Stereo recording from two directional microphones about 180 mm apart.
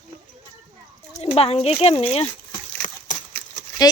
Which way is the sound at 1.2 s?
35° left (ahead or behind).